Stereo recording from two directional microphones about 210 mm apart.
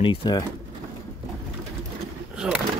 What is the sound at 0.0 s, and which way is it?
Speech, 25° left (ahead or behind).